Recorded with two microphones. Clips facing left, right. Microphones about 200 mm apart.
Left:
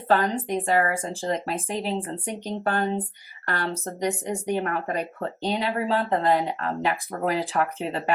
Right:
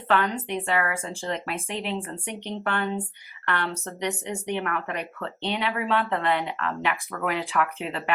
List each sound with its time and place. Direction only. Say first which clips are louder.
0.1 s speech: left 2 dB; 35° left (ahead or behind)